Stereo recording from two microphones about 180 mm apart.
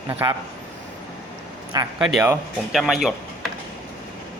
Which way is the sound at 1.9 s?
Centre (ahead or behind).